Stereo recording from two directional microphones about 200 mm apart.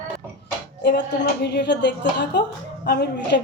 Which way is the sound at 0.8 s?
55° left (ahead or behind).